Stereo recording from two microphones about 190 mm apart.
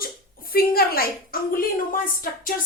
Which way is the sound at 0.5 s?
50° left (ahead or behind).